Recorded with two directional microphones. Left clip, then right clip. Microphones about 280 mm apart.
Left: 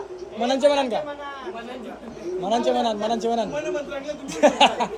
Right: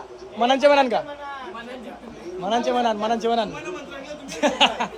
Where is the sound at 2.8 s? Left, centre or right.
Right.